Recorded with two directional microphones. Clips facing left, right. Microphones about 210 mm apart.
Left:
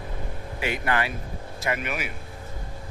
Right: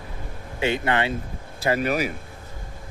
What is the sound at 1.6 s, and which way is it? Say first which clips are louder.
Speech: right 7 dB; 35° right (ahead or behind).